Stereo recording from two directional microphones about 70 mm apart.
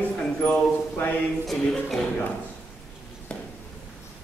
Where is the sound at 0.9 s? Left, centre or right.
Left.